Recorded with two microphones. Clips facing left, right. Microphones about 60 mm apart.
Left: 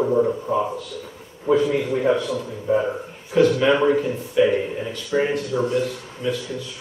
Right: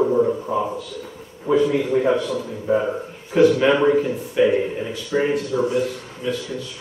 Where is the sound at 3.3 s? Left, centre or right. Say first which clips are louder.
Right 2 dB; centre.